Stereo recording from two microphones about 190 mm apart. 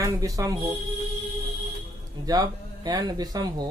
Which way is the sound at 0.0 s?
20° right (ahead or behind).